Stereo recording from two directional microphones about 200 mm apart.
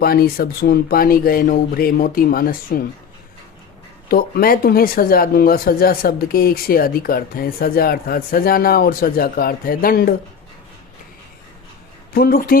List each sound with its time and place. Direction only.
0.0 s speech: 50° left (ahead or behind)
4.1 s speech: 45° left (ahead or behind)
12.1 s speech: 50° left (ahead or behind)